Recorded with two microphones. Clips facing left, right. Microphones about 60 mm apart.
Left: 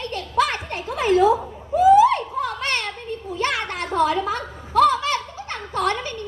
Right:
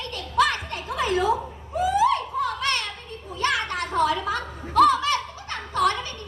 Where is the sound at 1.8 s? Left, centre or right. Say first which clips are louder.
Left 7 dB; left.